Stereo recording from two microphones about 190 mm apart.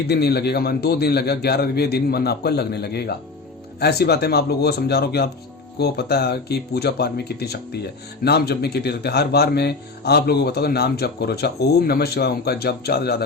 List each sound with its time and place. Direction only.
0.1 s speech: 60° left (ahead or behind)